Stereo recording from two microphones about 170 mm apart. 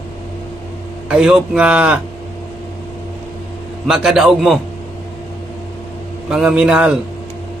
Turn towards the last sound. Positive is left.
turn(degrees=-5)  # may be behind; listen again after turning